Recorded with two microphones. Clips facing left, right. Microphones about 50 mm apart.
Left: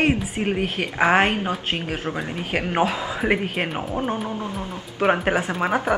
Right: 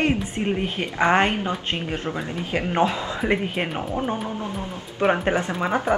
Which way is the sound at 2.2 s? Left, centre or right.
Left.